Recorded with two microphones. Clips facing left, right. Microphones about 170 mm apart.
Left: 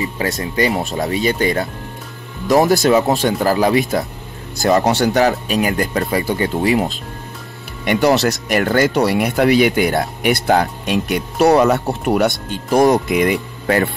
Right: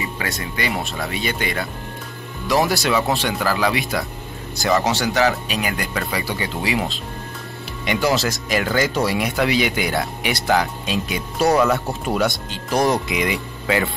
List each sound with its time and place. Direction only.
0.0 s speech: 40° left (ahead or behind)
7.8 s speech: 55° left (ahead or behind)
11.4 s speech: 40° left (ahead or behind)
11.9 s speech: 65° left (ahead or behind)
12.4 s speech: 50° left (ahead or behind)